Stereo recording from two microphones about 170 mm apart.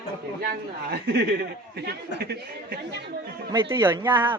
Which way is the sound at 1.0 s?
75° right (ahead or behind).